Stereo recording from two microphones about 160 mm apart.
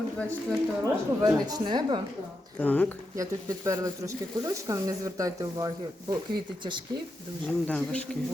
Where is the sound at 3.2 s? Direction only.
20° right (ahead or behind).